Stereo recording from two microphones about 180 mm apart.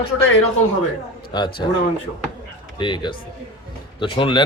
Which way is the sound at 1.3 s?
25° left (ahead or behind).